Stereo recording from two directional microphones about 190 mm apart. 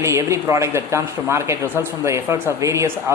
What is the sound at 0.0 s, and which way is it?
Speech, 15° right (ahead or behind).